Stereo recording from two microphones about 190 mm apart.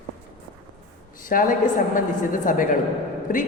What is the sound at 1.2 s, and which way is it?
A woman's voice, 45° left (ahead or behind).